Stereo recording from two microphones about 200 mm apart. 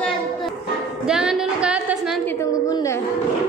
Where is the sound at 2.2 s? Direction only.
10° left (ahead or behind).